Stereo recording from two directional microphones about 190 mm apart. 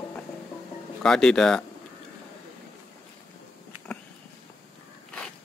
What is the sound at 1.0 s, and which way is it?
Speech, 5° left (ahead or behind).